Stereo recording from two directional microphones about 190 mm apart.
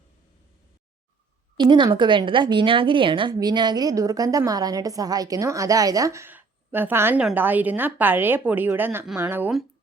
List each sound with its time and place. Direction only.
1.5 s a woman's voice: 25° right (ahead or behind); by 9.6 s 5° right (ahead or behind)